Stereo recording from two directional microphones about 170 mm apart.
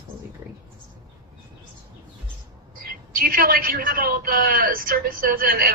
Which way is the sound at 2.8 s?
60° right (ahead or behind).